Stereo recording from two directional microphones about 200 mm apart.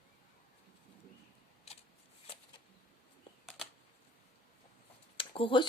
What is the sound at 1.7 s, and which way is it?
Shuffling cards, 30° left (ahead or behind).